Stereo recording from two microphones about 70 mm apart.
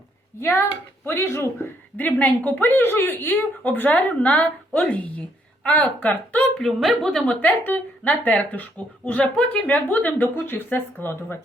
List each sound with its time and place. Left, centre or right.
0.3 s speech: left
2.0 s a woman's voice: left
6.6 s a woman's voice: centre
7.3 s a woman's voice: left